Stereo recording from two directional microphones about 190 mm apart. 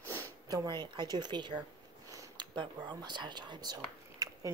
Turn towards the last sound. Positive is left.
turn(degrees=-20)  # may be behind; listen again after turning